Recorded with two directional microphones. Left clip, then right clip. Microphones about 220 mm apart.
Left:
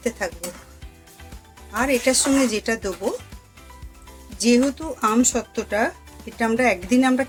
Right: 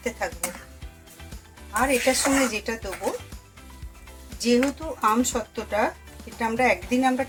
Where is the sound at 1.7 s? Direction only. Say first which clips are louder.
Left 2 dB; 45° left (ahead or behind).